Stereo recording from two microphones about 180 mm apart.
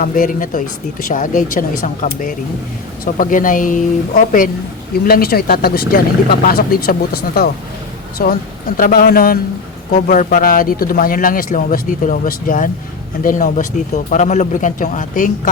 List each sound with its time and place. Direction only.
0.0 s speech: 45° left (ahead or behind)